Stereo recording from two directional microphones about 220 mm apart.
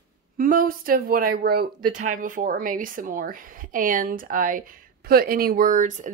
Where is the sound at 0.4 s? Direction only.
40° right (ahead or behind).